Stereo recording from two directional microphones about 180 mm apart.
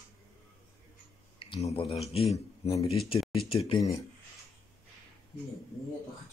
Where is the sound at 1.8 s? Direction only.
Centre (ahead or behind).